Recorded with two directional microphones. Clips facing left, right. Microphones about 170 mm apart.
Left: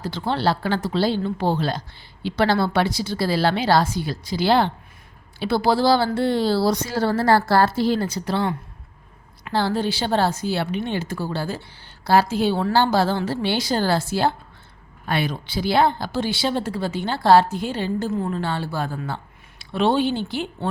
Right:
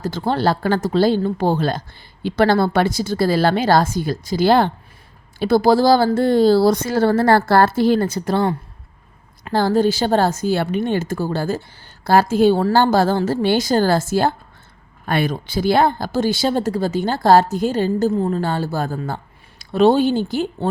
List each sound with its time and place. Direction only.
0.0 s speech: 45° right (ahead or behind)